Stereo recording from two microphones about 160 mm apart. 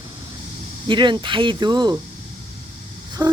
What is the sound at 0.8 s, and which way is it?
Speech, 30° right (ahead or behind).